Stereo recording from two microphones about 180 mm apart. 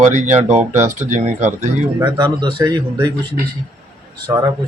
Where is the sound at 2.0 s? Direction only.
25° right (ahead or behind).